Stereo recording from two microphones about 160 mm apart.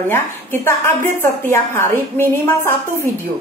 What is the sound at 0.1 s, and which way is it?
A woman's voice, 15° left (ahead or behind).